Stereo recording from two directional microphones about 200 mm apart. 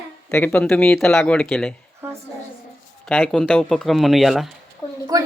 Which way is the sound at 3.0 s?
5° left (ahead or behind).